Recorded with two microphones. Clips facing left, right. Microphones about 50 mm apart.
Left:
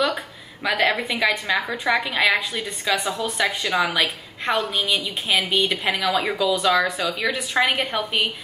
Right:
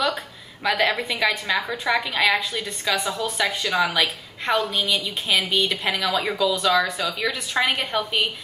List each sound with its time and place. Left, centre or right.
0.7 s a woman's voice: centre